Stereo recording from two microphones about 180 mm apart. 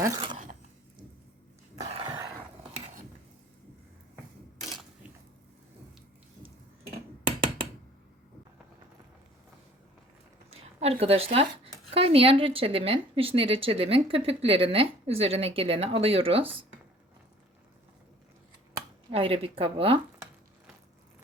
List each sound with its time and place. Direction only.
0.0 s a sound: 20° right (ahead or behind)
1.9 s dog: 30° right (ahead or behind)
10.5 s speech: 35° right (ahead or behind)
19.1 s speech: 30° right (ahead or behind)